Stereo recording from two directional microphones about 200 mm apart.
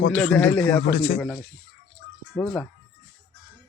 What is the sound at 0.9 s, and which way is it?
Speech, 40° left (ahead or behind).